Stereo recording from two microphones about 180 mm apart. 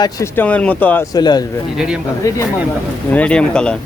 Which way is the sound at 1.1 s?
20° left (ahead or behind).